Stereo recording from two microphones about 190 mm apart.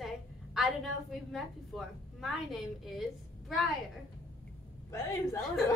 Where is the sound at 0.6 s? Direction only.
Centre (ahead or behind).